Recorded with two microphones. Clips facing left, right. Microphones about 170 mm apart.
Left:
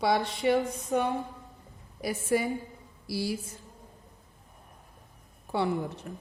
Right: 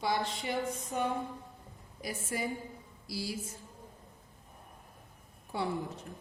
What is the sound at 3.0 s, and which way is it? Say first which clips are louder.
Speech: left 7 dB; 65° left (ahead or behind).